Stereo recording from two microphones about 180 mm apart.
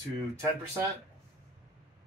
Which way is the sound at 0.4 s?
15° right (ahead or behind).